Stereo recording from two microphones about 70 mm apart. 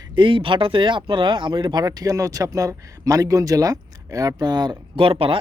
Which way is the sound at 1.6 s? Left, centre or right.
Right.